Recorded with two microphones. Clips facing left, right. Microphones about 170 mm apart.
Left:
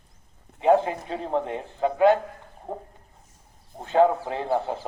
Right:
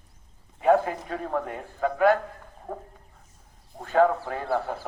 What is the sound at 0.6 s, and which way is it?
A man's voice, 25° left (ahead or behind).